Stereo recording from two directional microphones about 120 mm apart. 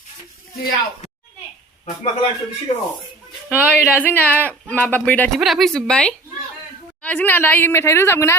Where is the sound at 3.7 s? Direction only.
15° left (ahead or behind).